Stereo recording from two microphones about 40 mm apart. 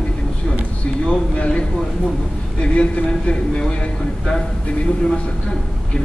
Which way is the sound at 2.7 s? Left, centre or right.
Left.